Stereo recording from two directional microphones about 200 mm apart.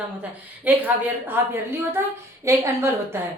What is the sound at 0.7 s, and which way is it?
A woman's voice, 10° right (ahead or behind).